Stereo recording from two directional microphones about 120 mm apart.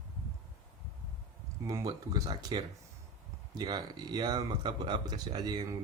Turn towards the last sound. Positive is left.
turn(degrees=-35)  # may be behind; listen again after turning